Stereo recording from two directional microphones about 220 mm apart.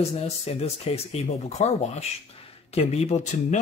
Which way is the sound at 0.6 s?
30° left (ahead or behind).